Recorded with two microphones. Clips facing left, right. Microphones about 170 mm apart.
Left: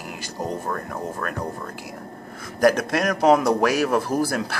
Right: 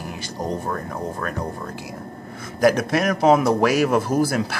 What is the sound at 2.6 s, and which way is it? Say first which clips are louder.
A man's voice: right 1 dB; 10° right (ahead or behind).